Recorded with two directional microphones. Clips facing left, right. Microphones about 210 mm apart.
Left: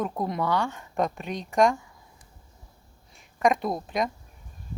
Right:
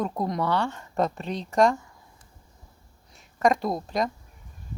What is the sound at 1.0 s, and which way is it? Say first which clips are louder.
Speech: right 1 dB; 15° left (ahead or behind).